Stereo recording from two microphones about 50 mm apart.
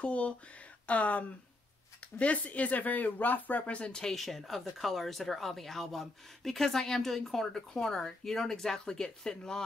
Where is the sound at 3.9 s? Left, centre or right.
Centre.